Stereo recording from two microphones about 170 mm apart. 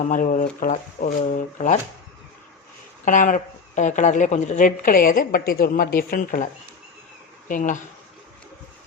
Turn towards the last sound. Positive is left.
turn(degrees=50)  # may be behind; listen again after turning